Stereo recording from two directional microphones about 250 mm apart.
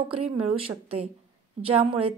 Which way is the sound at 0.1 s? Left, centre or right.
Right.